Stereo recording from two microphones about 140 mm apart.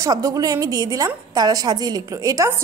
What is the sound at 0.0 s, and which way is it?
A woman's voice, 25° right (ahead or behind).